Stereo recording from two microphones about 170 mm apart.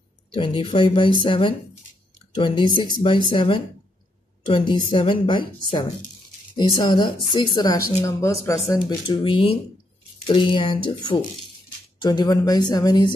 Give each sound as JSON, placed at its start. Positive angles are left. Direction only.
{"t": 0.3, "sound": "a woman's voice", "side_deg": 30}
{"t": 8.8, "sound": "a woman's voice", "side_deg": 30}